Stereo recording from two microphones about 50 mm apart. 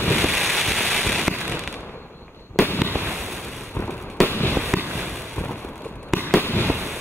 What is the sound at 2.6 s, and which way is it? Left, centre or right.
Fireworks, left.